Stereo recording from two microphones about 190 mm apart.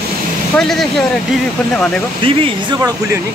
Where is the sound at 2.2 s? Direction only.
25° right (ahead or behind).